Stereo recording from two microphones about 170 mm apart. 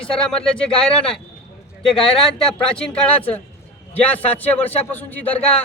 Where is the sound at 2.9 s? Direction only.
10° left (ahead or behind).